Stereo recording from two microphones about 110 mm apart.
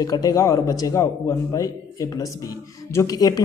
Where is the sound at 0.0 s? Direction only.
35° left (ahead or behind).